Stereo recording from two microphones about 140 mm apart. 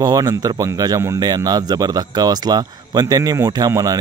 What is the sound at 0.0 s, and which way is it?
Speech, 30° right (ahead or behind).